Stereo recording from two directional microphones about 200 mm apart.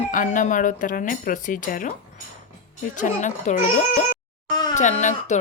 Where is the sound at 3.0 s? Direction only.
40° left (ahead or behind).